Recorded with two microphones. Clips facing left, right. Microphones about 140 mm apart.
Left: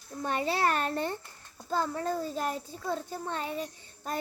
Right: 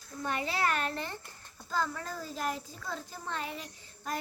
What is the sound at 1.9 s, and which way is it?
A child's voice, 30° left (ahead or behind).